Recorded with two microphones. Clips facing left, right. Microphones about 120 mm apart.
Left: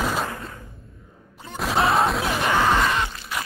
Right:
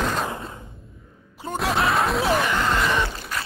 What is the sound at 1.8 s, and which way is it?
Smash, 30° left (ahead or behind).